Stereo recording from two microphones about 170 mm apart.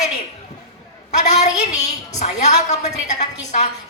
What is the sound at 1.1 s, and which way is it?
A woman's voice, 45° left (ahead or behind).